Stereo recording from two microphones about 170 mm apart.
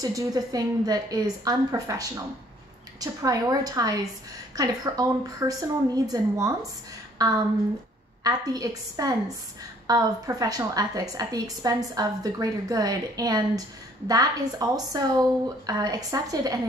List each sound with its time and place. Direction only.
0.0 s a woman's voice: 20° right (ahead or behind)